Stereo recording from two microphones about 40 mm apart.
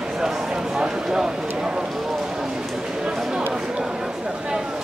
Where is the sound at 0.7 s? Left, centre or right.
Centre.